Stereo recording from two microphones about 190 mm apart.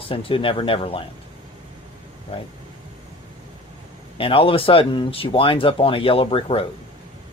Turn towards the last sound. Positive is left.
turn(degrees=30)  # may be behind; listen again after turning